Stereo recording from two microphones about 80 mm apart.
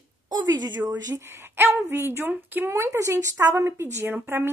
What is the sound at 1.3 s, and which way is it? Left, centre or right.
Speech, right.